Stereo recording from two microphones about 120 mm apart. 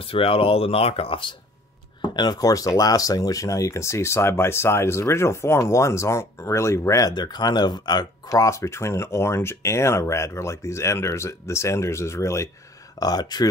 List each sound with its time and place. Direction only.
0.0 s speech: 50° left (ahead or behind)
2.0 s speech: 35° left (ahead or behind)